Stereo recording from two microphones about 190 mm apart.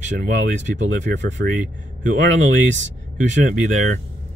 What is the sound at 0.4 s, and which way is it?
Speech, 70° right (ahead or behind).